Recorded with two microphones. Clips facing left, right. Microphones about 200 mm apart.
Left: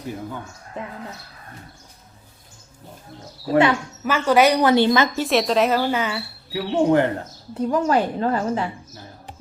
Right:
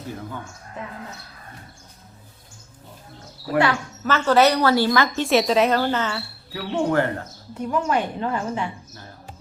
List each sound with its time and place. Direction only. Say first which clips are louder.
3.4 s speech: left 3 dB; 20° left (ahead or behind)
5.1 s speech: right 1 dB; centre (ahead or behind); by 7.1 s 20° left (ahead or behind)
7.5 s a woman's voice: left 3 dB; 35° left (ahead or behind)